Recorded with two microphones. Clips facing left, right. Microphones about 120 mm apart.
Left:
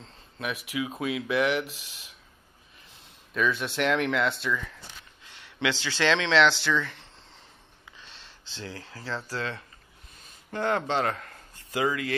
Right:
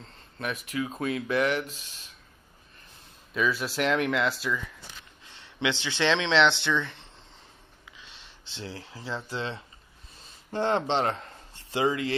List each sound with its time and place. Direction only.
0.0 s speech: centre (ahead or behind)
3.3 s speech: 5° right (ahead or behind)
5.2 s speech: 25° right (ahead or behind)
8.5 s speech: 25° right (ahead or behind)